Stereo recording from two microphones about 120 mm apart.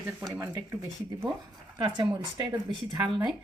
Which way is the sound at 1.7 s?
35° right (ahead or behind).